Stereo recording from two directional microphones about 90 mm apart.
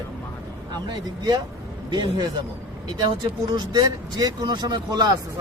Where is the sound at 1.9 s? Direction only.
60° right (ahead or behind).